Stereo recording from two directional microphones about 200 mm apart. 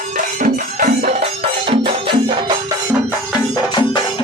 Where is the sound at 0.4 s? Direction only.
45° right (ahead or behind).